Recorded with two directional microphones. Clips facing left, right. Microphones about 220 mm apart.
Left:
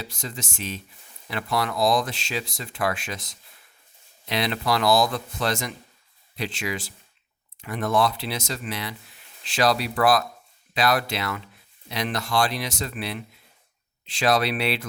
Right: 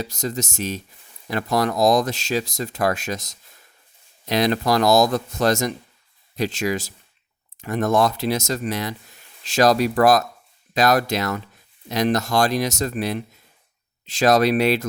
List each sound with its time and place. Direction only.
0.0 s speech: 40° right (ahead or behind)